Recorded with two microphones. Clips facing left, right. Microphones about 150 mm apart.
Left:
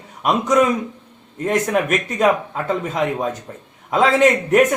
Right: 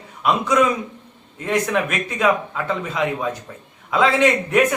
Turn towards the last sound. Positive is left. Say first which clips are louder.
# left 3 dB
turn(degrees=45)  # may be behind; listen again after turning